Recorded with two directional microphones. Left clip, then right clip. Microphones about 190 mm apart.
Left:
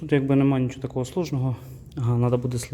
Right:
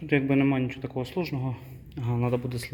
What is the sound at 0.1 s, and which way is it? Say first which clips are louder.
A man's voice: left 3 dB; 15° left (ahead or behind).